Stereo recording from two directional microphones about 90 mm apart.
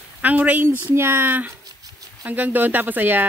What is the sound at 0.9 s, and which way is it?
Speech, 25° right (ahead or behind).